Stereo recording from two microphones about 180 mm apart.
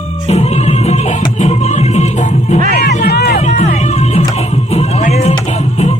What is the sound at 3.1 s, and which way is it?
Music, 65° left (ahead or behind).